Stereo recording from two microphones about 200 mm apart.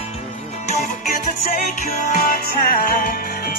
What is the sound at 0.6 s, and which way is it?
Music, 40° left (ahead or behind).